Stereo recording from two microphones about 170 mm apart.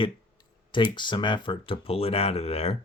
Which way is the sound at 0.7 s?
30° left (ahead or behind).